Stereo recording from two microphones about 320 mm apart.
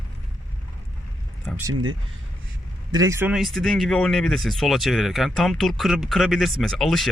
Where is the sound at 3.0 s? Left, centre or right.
Centre.